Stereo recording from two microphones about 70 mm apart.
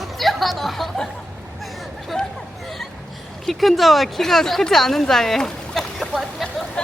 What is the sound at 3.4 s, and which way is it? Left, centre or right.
Speech, centre.